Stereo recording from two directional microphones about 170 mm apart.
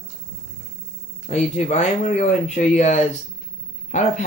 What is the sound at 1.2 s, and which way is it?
Speech, 40° left (ahead or behind).